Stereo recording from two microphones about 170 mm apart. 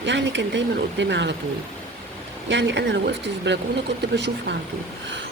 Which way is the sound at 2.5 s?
90° right.